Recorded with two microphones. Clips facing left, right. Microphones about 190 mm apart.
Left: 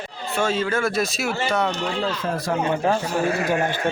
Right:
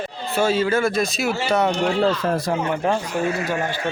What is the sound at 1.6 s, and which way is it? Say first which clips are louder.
Speech: right 3 dB; 20° right (ahead or behind).